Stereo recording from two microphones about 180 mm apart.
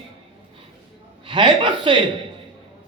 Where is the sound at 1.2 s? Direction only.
30° right (ahead or behind).